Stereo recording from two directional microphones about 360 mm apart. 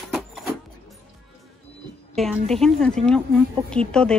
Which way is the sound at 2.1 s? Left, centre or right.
Centre.